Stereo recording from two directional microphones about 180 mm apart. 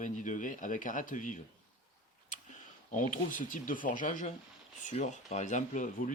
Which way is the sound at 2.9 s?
45° left (ahead or behind).